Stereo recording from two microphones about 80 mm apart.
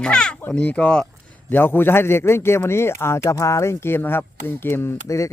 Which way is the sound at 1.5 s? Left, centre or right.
Left.